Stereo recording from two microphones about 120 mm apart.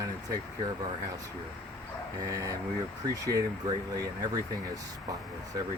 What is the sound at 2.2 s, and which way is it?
Speech, 30° right (ahead or behind).